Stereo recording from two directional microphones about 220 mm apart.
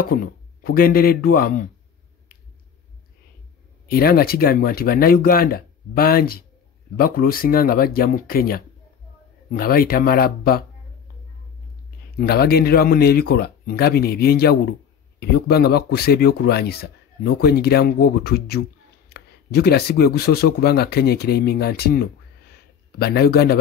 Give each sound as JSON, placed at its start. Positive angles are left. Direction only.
{"t": 0.0, "sound": "speech", "side_deg": 40}
{"t": 3.9, "sound": "speech", "side_deg": 45}
{"t": 12.2, "sound": "speech", "side_deg": 45}